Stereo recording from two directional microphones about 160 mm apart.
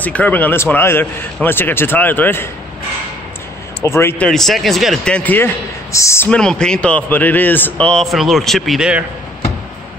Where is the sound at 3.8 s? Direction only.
15° left (ahead or behind).